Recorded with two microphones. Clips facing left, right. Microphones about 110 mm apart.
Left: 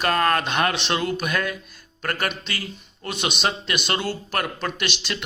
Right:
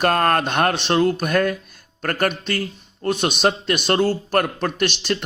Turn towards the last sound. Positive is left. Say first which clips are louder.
# right 7 dB
turn(degrees=-50)  # may be behind; listen again after turning